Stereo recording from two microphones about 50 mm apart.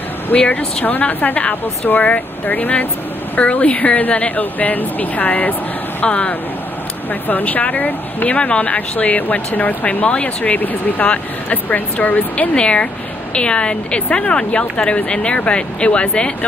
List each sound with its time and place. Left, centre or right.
0.3 s speech: left
6.0 s a woman's voice: left
7.2 s speech: left
12.5 s a woman's voice: left